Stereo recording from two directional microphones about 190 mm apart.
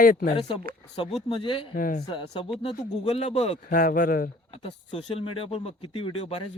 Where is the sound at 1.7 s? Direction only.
50° left (ahead or behind).